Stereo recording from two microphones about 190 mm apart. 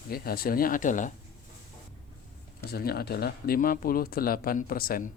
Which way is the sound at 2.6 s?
55° left (ahead or behind).